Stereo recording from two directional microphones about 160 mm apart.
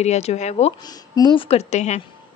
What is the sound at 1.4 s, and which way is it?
Speech, 45° left (ahead or behind).